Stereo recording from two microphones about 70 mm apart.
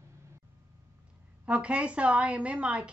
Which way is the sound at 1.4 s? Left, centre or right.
Centre.